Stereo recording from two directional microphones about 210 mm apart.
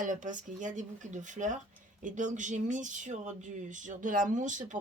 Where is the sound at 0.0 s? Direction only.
40° right (ahead or behind).